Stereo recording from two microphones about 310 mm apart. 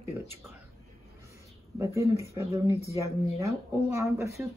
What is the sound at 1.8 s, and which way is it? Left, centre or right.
Speech, centre.